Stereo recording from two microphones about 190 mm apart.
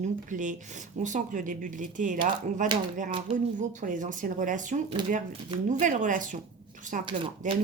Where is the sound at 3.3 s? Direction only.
40° right (ahead or behind).